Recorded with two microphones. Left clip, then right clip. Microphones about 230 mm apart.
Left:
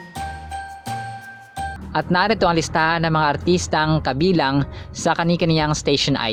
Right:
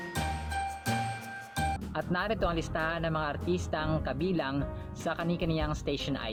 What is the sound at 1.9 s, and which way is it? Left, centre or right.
Speech, left.